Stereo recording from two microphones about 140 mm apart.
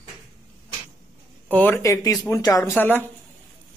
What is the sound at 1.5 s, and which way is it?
Speech, 10° left (ahead or behind).